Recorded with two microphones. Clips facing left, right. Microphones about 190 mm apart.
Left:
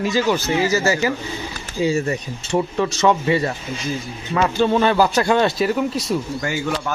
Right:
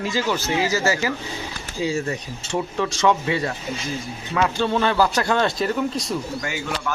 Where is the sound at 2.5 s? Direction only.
15° left (ahead or behind).